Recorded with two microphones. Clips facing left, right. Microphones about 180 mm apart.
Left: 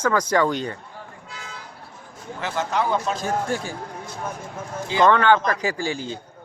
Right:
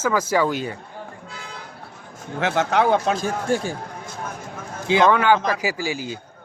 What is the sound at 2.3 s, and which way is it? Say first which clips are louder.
Speech: right 5 dB; 75° right (ahead or behind).